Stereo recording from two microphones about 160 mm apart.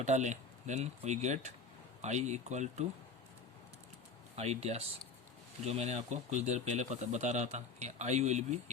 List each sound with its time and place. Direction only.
0.0 s speech: 45° right (ahead or behind)
4.4 s speech: 40° right (ahead or behind)